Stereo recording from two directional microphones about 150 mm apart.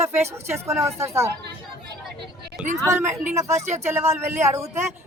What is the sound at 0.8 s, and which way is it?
Speech, 20° right (ahead or behind).